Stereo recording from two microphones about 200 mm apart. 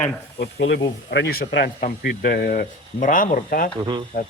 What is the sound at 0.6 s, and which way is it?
Speech, 60° left (ahead or behind).